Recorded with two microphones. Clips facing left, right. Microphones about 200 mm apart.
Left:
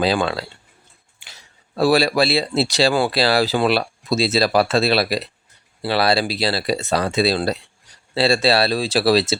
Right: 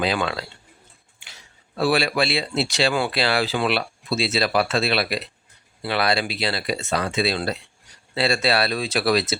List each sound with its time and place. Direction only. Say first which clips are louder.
0.0 s speech: left 4 dB; 35° left (ahead or behind)